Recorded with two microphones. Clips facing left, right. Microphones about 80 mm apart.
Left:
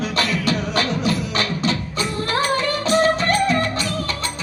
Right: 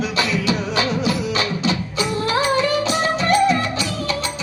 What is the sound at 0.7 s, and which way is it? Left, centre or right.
Music, left.